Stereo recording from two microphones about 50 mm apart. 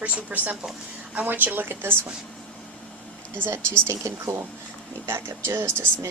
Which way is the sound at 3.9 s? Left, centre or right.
Right.